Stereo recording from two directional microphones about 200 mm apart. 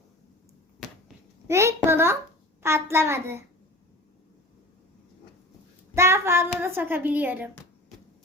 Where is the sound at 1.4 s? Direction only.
15° right (ahead or behind).